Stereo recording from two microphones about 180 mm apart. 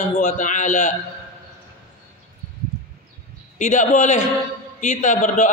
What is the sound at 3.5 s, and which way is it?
A man's voice, 45° left (ahead or behind).